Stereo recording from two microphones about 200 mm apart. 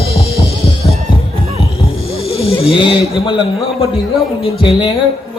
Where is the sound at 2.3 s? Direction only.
30° left (ahead or behind).